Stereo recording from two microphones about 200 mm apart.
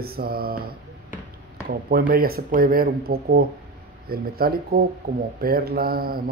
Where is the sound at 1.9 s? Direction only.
50° right (ahead or behind).